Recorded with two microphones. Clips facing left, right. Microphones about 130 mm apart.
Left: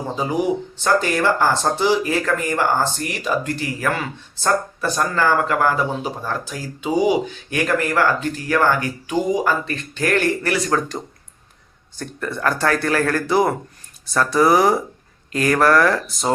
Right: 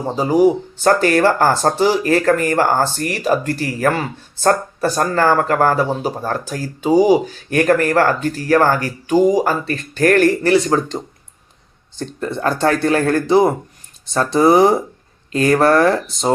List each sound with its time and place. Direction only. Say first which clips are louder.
0.8 s speech: right 6 dB; 50° right (ahead or behind)
10.4 s speech: right 6 dB; 30° right (ahead or behind)